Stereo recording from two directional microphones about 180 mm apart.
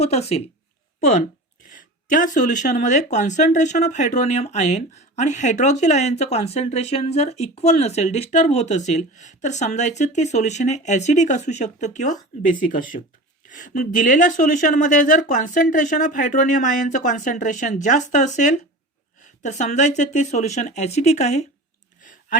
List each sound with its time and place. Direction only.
0.0 s speech: 35° left (ahead or behind)
2.0 s speech: 45° left (ahead or behind)
13.5 s speech: 45° left (ahead or behind)